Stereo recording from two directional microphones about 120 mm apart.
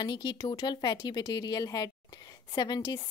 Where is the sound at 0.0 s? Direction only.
40° left (ahead or behind).